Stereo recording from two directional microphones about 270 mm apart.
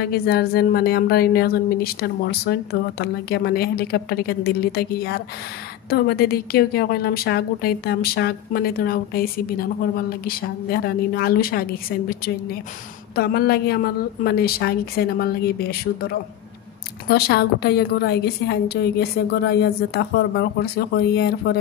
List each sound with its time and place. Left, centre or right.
0.0 s a woman's voice: left
13.1 s a woman's voice: left
17.1 s a woman's voice: left